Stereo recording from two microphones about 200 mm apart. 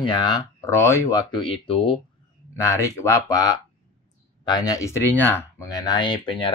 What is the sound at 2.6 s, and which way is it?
Speech, 15° left (ahead or behind).